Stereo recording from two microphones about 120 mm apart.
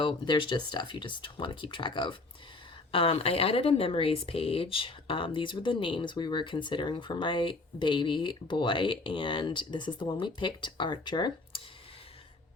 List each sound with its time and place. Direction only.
0.0 s speech: 40° left (ahead or behind)